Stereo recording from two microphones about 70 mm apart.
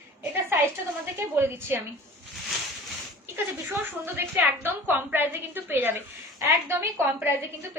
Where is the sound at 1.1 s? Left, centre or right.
Right.